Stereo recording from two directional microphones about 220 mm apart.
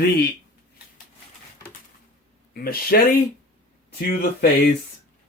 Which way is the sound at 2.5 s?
40° left (ahead or behind).